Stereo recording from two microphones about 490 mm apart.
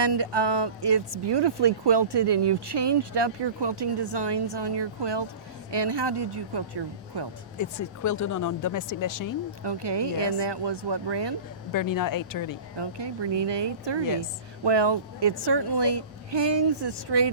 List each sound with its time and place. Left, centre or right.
0.0 s a woman's voice: right
7.6 s speech: left
9.6 s speech: right
11.7 s speech: left
12.7 s speech: right